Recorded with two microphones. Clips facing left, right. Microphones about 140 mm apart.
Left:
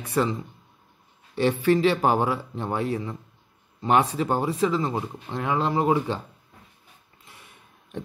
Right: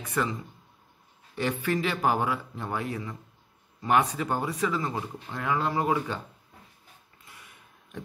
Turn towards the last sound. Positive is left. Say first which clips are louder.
# left 3 dB
turn(degrees=25)  # may be behind; listen again after turning